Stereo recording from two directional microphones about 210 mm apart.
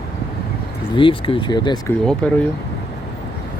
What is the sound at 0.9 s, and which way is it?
Speech, 25° left (ahead or behind).